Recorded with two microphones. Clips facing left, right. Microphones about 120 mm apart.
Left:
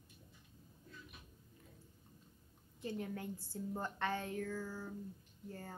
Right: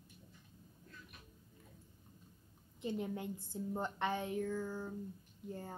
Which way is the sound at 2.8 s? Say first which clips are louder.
Right 3 dB; 20° right (ahead or behind).